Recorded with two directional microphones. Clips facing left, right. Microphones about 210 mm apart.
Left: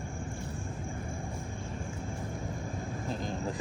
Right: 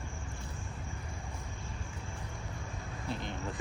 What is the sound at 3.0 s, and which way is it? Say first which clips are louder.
Vehicle: left 3 dB; 40° left (ahead or behind).